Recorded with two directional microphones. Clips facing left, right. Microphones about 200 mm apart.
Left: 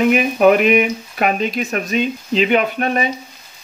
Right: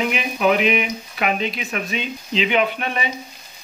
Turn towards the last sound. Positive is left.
turn(degrees=45)  # may be behind; listen again after turning